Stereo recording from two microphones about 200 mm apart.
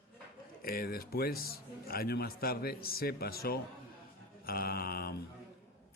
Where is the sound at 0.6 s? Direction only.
50° left (ahead or behind).